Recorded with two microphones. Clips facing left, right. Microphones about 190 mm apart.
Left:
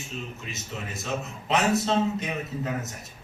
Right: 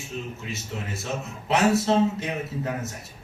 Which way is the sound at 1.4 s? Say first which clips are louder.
Right 3 dB; 20° left (ahead or behind).